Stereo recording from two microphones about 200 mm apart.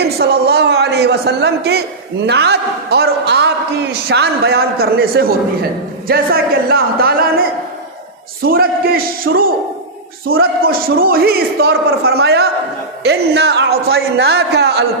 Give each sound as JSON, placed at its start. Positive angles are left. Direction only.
{"t": 0.2, "sound": "a man's voice", "side_deg": -55}